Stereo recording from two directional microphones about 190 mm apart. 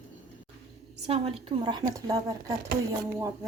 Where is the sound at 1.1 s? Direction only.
30° right (ahead or behind).